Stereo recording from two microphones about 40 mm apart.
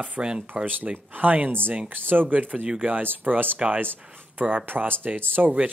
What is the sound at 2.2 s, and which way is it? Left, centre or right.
Speech, right.